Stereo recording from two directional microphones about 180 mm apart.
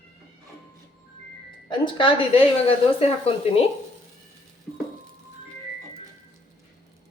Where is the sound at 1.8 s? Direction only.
30° left (ahead or behind).